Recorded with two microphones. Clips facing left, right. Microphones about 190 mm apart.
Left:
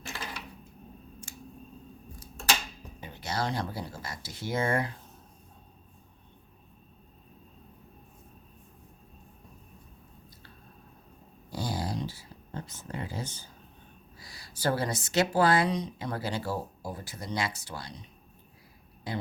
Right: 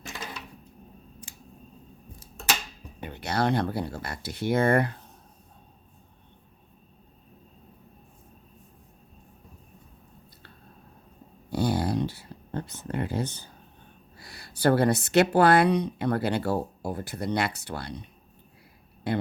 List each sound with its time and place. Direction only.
3.0 s a woman's voice: 60° right (ahead or behind)
11.5 s a sound: 60° right (ahead or behind)
14.2 s a woman's voice: 60° right (ahead or behind)